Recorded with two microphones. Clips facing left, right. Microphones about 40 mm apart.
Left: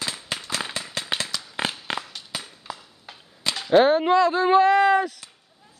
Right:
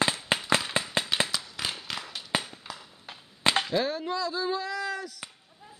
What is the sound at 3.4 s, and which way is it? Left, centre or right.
Chop, right.